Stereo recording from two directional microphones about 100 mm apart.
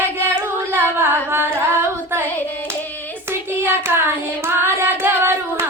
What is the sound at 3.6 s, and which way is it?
Child singing, 25° right (ahead or behind).